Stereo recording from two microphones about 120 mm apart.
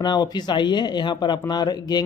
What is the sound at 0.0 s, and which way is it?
Speech, 40° left (ahead or behind).